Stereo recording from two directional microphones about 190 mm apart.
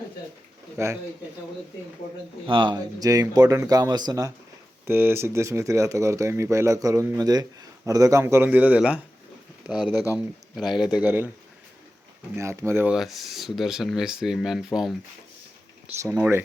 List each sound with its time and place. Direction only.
2.5 s speech: 25° right (ahead or behind)
12.4 s speech: 15° right (ahead or behind)
16.0 s speech: 10° right (ahead or behind)